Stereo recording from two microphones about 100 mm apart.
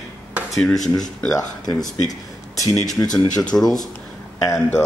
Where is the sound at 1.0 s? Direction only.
40° left (ahead or behind).